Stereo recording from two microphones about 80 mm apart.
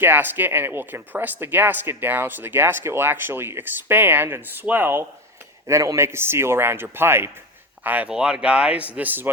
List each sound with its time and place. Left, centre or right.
0.0 s speech: right
5.6 s a man's voice: right